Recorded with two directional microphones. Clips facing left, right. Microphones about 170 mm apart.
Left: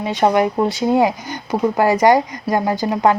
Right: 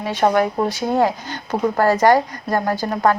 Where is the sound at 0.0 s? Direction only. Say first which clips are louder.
Left 2 dB; 15° left (ahead or behind).